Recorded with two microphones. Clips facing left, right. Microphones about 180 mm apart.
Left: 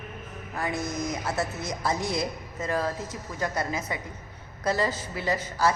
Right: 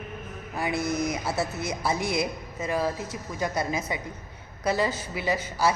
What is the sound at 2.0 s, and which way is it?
Speech, 20° left (ahead or behind).